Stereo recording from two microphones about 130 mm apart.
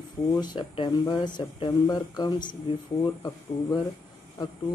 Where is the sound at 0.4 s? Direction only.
35° left (ahead or behind).